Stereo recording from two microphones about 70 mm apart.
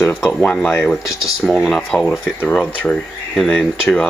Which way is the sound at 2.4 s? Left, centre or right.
Left.